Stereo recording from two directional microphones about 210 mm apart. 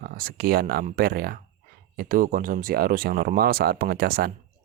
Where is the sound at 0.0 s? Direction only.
45° right (ahead or behind).